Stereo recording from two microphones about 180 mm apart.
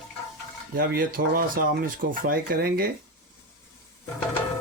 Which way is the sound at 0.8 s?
55° right (ahead or behind).